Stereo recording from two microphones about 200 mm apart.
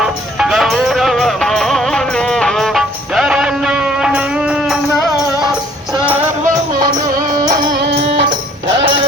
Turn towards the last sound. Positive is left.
turn(degrees=-45)  # may be behind; listen again after turning